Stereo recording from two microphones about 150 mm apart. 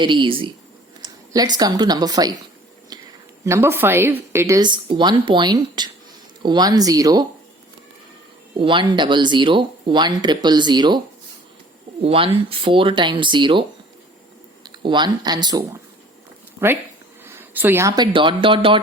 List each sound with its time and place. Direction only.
0.0 s speech: 35° right (ahead or behind)
2.9 s a sound: 30° right (ahead or behind)
3.4 s a woman's voice: 15° right (ahead or behind)
8.5 s speech: 35° right (ahead or behind)
12.0 s speech: 40° right (ahead or behind)
17.2 s a sound: 15° right (ahead or behind)
17.9 s speech: 30° right (ahead or behind)